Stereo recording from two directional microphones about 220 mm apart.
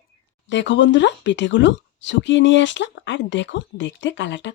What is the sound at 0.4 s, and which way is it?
Speech, 55° left (ahead or behind).